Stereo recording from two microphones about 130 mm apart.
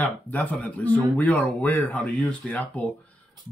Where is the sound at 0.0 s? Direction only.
15° left (ahead or behind).